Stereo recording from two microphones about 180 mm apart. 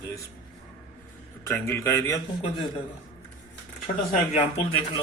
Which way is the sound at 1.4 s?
15° left (ahead or behind).